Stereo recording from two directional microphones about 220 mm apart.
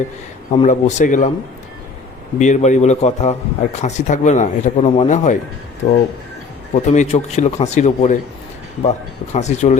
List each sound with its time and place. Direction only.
0.5 s a man's voice: 30° left (ahead or behind)
2.4 s a man's voice: 35° left (ahead or behind)
6.7 s a man's voice: 30° left (ahead or behind)